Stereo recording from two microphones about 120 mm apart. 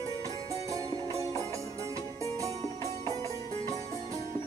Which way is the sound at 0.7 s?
25° right (ahead or behind).